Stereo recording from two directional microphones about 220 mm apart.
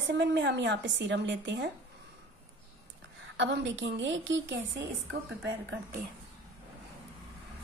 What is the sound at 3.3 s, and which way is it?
A woman's voice, 55° right (ahead or behind).